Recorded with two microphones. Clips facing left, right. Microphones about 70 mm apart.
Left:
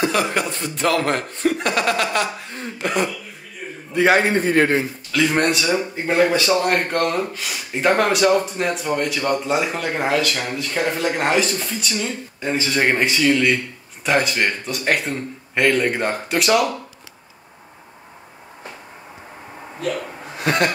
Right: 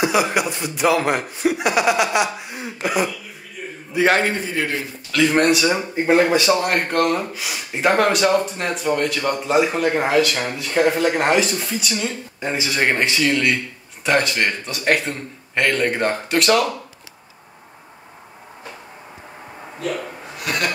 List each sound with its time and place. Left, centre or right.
0.0 s a man's voice: centre
4.4 s a man's voice: left
5.1 s speech: centre
12.4 s speech: centre
12.6 s speech: centre
20.3 s a sound: left